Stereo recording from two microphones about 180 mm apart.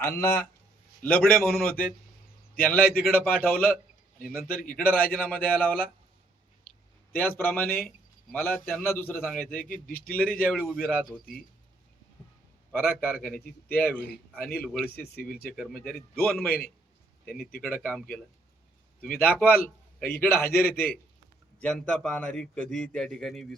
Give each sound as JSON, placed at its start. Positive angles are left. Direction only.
{"t": 0.0, "sound": "a man's voice", "side_deg": 15}
{"t": 2.8, "sound": "speech", "side_deg": 55}
{"t": 3.1, "sound": "a man's voice", "side_deg": 5}
{"t": 7.1, "sound": "a man's voice", "side_deg": 10}
{"t": 9.5, "sound": "a man's voice", "side_deg": 50}
{"t": 10.1, "sound": "a man's voice", "side_deg": 5}
{"t": 12.7, "sound": "a man's voice", "side_deg": 10}
{"t": 14.8, "sound": "speech", "side_deg": 60}
{"t": 15.5, "sound": "a man's voice", "side_deg": 5}
{"t": 16.5, "sound": "speech", "side_deg": 55}
{"t": 17.7, "sound": "a man's voice", "side_deg": 5}
{"t": 19.2, "sound": "a man's voice", "side_deg": 10}